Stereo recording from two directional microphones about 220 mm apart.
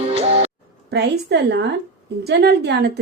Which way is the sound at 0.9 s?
50° right (ahead or behind).